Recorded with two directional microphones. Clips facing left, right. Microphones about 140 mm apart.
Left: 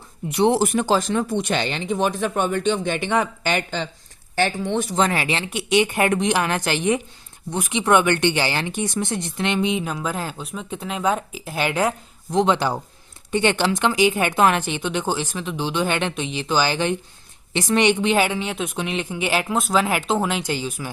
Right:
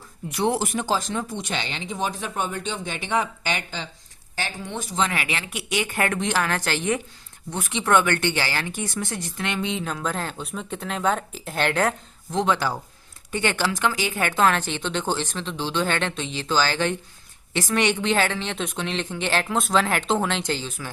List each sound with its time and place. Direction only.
0.3 s a woman's voice: 20° left (ahead or behind)
0.8 s speech: 65° left (ahead or behind)
4.9 s a woman's voice: 35° left (ahead or behind); by 20.9 s 10° left (ahead or behind)